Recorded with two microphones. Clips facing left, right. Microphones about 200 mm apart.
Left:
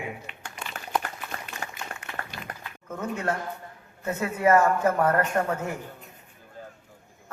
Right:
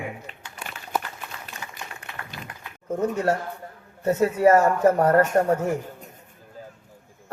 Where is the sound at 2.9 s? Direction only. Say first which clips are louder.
Right 6 dB; 40° right (ahead or behind).